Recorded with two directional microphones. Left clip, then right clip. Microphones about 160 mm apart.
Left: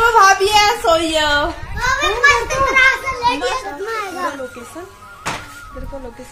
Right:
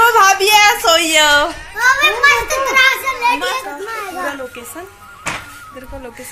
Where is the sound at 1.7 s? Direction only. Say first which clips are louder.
Right 6 dB; 30° right (ahead or behind).